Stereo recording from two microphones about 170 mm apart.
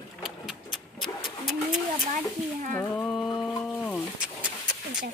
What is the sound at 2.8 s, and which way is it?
Speech, 5° left (ahead or behind).